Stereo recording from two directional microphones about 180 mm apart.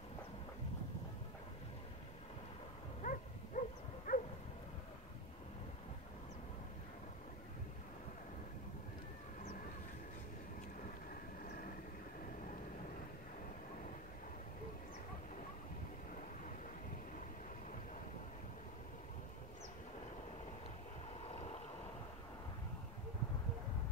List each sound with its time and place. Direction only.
3.0 s dog: 45° left (ahead or behind)
11.4 s vehicle: 55° left (ahead or behind)
21.2 s vehicle: 35° left (ahead or behind)